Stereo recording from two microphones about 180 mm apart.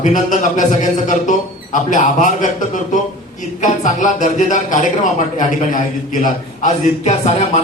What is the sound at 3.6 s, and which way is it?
A man's voice, 45° left (ahead or behind).